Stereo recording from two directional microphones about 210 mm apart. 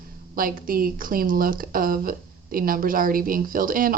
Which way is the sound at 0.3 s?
45° right (ahead or behind).